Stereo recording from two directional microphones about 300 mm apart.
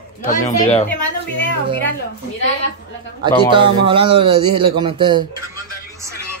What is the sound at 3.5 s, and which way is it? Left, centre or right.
Speech, centre.